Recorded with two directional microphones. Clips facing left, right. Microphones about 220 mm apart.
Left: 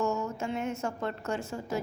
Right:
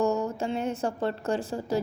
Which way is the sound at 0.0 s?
35° right (ahead or behind).